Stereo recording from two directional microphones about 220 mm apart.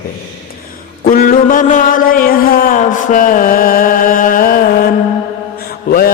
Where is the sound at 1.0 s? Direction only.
40° left (ahead or behind).